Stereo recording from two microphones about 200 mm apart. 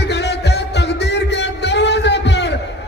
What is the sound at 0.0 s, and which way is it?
Music, 55° left (ahead or behind).